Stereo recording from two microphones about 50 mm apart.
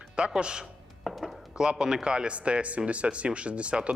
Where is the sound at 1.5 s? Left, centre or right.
Centre.